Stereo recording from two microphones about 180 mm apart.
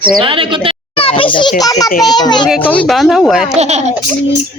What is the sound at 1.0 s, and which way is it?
A child's voice, 30° left (ahead or behind).